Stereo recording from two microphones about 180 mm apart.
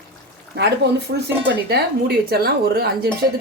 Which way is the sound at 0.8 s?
65° right (ahead or behind).